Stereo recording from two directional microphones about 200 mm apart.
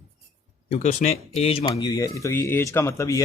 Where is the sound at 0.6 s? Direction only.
35° left (ahead or behind).